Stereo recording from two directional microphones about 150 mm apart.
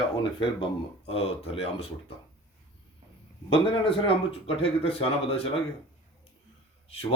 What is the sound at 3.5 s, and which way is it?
Speech, 35° left (ahead or behind).